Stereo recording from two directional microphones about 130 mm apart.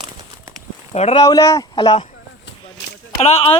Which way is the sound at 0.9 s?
55° left (ahead or behind).